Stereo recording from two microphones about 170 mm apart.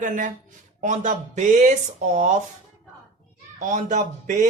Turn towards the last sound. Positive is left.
turn(degrees=-45)  # may be behind; listen again after turning